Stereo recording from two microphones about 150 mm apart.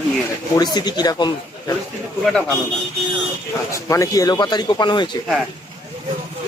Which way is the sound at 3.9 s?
20° left (ahead or behind).